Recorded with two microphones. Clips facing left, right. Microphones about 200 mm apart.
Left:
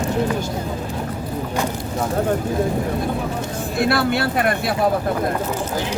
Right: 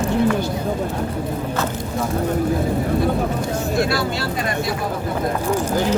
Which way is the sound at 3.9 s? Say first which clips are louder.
Left 3 dB; 60° left (ahead or behind).